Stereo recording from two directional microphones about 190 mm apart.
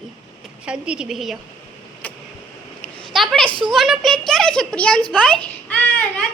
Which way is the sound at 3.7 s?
Centre (ahead or behind).